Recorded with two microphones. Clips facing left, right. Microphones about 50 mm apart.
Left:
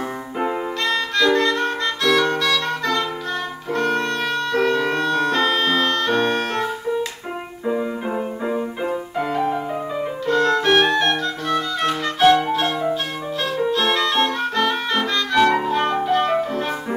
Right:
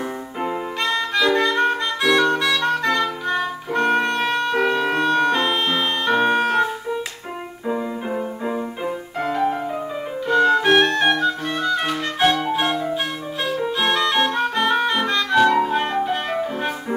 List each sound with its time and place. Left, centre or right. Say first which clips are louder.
0.8 s music: left 1 dB; centre
10.2 s organ: right 2 dB; centre
11.1 s clarinet: right 2 dB; centre
11.6 s music: right 1 dB; centre
11.9 s music: left 8 dB; centre
13.7 s music: even; centre
16.0 s music: left 3 dB; centre